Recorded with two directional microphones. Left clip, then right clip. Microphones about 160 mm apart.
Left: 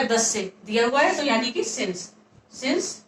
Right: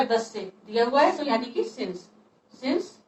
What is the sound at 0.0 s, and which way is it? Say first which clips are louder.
A woman's voice: left 2 dB; 20° left (ahead or behind).